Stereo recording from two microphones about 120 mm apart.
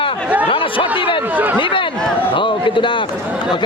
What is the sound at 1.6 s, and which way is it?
A man's voice, 45° left (ahead or behind).